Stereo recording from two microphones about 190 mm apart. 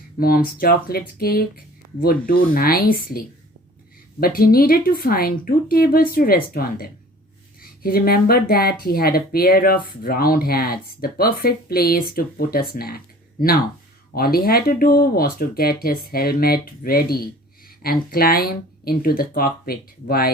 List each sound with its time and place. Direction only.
0.2 s speech: 50° left (ahead or behind)
4.4 s speech: 50° left (ahead or behind)